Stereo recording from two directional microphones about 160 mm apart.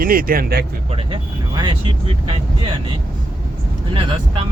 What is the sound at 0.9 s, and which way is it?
Speech, 30° right (ahead or behind).